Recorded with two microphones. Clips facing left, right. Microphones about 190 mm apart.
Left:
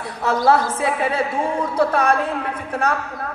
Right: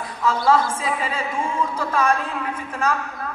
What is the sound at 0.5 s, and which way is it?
Speech, 65° left (ahead or behind).